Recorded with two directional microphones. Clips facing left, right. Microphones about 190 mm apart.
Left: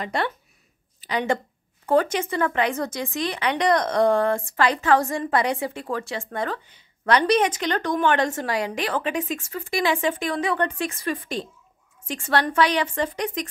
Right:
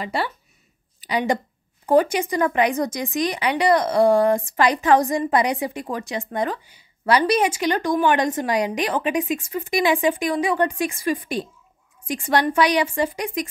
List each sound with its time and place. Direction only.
0.0 s speech: 5° right (ahead or behind)